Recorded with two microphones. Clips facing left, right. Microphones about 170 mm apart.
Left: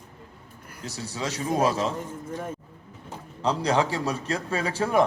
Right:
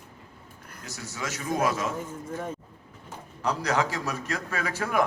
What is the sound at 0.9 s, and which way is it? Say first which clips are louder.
A man's voice: left 4 dB; 30° left (ahead or behind).